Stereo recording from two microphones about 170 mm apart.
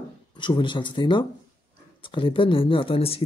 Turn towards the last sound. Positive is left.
turn(degrees=35)  # may be behind; listen again after turning